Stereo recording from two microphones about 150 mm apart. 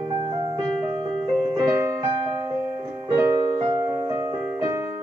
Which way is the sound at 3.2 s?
20° right (ahead or behind).